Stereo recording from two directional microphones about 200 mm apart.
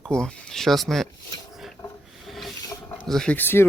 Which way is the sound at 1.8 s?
20° left (ahead or behind).